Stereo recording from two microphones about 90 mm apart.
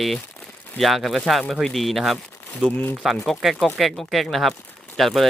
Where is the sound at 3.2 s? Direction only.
Centre (ahead or behind).